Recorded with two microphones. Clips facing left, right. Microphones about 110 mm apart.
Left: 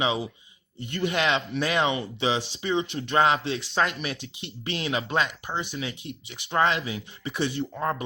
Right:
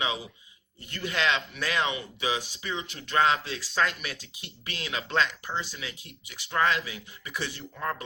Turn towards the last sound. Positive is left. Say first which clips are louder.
# left 6 dB
turn(degrees=25)  # may be behind; listen again after turning